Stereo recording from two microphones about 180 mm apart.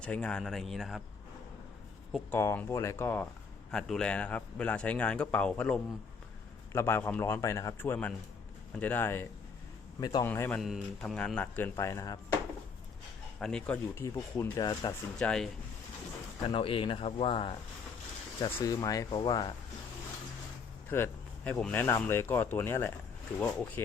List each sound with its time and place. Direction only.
0.0 s a man's voice: 5° left (ahead or behind)
2.3 s speech: 10° left (ahead or behind)
3.7 s speech: 5° left (ahead or behind)
10.0 s speech: 20° left (ahead or behind)
10.6 s speech: centre (ahead or behind); by 12.2 s 20° left (ahead or behind)
13.4 s speech: 5° left (ahead or behind); by 14.9 s 20° left (ahead or behind)
15.2 s a man's voice: 5° left (ahead or behind)
16.5 s speech: 30° left (ahead or behind)
20.9 s speech: 10° left (ahead or behind)